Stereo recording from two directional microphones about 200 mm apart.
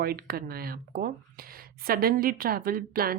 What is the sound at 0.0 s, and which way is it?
Speech, 50° right (ahead or behind).